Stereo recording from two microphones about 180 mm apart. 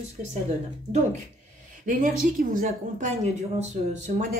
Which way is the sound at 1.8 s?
45° right (ahead or behind).